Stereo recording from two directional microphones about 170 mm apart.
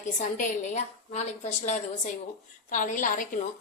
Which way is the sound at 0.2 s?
45° left (ahead or behind).